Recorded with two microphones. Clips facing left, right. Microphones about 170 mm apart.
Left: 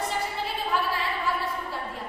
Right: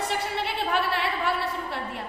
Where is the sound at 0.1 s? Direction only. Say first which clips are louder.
Right 2 dB; 70° right (ahead or behind).